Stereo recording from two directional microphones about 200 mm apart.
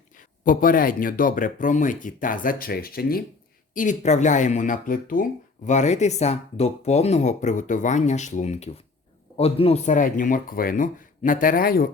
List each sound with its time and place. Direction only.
0.4 s speech: 45° left (ahead or behind)
3.8 s speech: 35° left (ahead or behind)